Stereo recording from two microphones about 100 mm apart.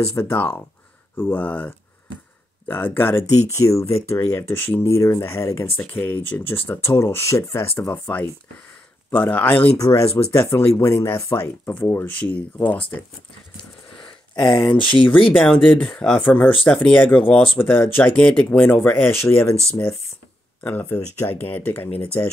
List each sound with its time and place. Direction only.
0.0 s speech: 30° left (ahead or behind)
5.8 s speech: 20° left (ahead or behind)
9.8 s speech: 30° left (ahead or behind); by 13.0 s 15° left (ahead or behind)
13.9 s a sound: 50° left (ahead or behind)
15.3 s speech: 10° left (ahead or behind)
17.6 s speech: 20° left (ahead or behind)
18.1 s speech: 10° left (ahead or behind)
20.6 s speech: 15° left (ahead or behind)